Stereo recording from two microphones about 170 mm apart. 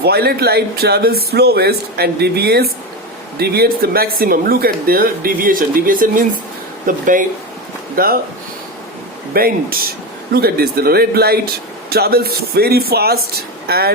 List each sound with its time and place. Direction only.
0.0 s speech: 70° right (ahead or behind)
9.3 s speech: 60° right (ahead or behind)